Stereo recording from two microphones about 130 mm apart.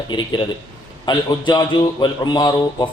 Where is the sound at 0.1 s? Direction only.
35° left (ahead or behind).